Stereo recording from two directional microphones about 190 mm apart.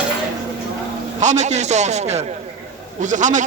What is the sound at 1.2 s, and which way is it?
A man's voice, 40° right (ahead or behind).